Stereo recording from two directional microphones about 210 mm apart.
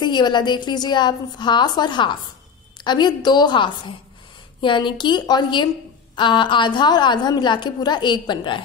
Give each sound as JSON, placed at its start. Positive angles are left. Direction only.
{"t": 0.0, "sound": "a woman's voice", "side_deg": 20}